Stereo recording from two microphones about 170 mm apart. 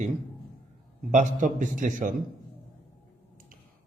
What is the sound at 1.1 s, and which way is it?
A man's voice, 50° right (ahead or behind).